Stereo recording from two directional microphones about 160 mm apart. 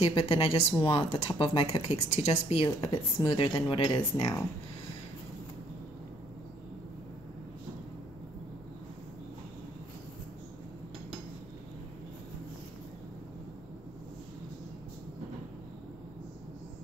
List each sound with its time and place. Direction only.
0.0 s speech: 35° left (ahead or behind)